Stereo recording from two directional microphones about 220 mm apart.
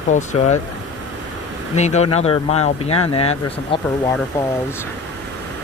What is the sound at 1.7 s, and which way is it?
Speech, 30° left (ahead or behind).